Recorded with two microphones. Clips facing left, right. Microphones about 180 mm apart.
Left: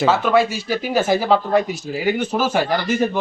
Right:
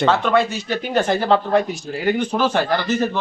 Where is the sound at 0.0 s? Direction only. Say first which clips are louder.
Left 1 dB; 5° left (ahead or behind).